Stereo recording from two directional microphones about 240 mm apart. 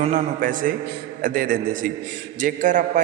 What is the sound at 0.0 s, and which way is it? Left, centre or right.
A man's voice, right.